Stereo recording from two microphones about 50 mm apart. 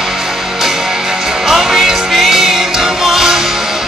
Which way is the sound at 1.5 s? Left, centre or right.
Centre.